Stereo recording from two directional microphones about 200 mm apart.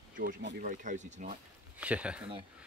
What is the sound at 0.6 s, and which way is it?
Speech, 40° right (ahead or behind).